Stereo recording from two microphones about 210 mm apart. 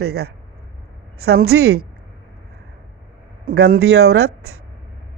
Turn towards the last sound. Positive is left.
turn(degrees=-50)  # may be behind; listen again after turning